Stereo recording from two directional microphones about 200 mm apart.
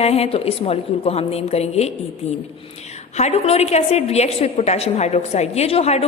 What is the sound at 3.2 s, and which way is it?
A woman's voice, 35° left (ahead or behind).